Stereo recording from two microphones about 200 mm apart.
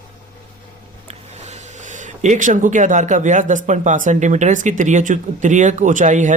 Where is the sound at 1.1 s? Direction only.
35° right (ahead or behind).